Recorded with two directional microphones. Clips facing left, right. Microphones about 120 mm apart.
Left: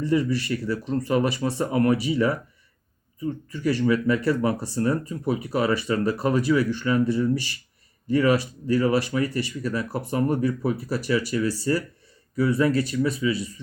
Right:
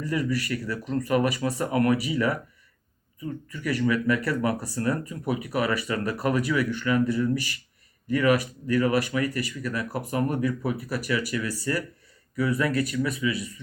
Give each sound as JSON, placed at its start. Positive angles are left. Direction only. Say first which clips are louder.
{"t": 0.0, "sound": "speech", "louder": "left 4 dB", "side_deg": 25}